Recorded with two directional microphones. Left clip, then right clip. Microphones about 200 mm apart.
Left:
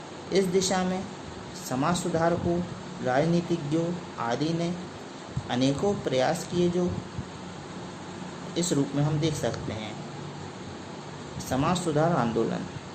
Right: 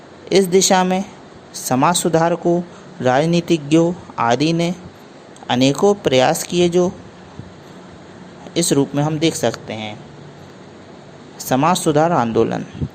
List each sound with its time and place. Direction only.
0.3 s speech: 45° right (ahead or behind)
8.5 s speech: 40° right (ahead or behind)
11.4 s speech: 45° right (ahead or behind)